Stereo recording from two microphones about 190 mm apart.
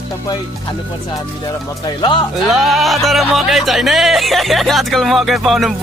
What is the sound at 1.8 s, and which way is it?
Speech, 25° left (ahead or behind).